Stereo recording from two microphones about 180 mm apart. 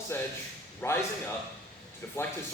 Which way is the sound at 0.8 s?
15° left (ahead or behind).